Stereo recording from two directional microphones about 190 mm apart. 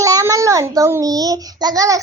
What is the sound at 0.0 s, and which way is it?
Child singing, 15° right (ahead or behind).